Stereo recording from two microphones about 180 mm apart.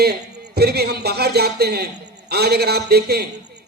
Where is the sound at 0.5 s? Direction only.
60° right (ahead or behind).